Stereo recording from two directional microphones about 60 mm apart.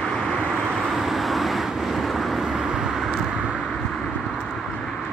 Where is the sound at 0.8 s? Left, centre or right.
Centre.